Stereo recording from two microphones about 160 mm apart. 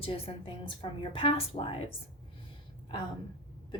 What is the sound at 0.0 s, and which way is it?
A woman's voice, 35° left (ahead or behind).